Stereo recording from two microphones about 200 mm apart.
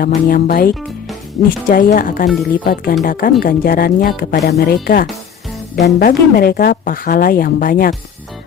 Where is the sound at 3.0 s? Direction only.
45° left (ahead or behind).